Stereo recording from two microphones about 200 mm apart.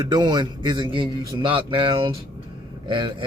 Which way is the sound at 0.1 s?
20° right (ahead or behind).